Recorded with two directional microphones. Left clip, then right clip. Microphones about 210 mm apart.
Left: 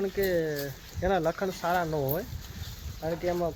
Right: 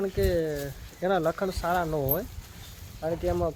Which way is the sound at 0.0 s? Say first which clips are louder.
Right 1 dB; 15° right (ahead or behind).